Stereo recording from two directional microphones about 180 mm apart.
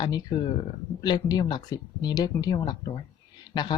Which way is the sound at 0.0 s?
25° left (ahead or behind).